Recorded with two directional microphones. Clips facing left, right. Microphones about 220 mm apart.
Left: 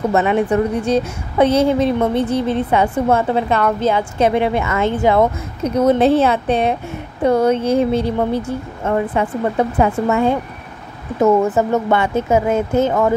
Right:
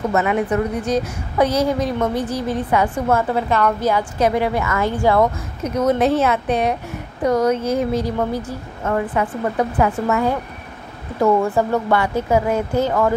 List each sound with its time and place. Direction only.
0.1 s a woman's voice: 30° left (ahead or behind)